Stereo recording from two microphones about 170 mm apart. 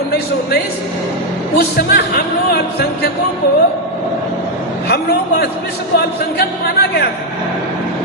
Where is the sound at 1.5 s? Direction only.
65° left (ahead or behind).